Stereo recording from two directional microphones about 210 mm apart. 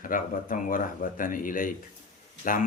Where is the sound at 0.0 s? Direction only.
40° left (ahead or behind).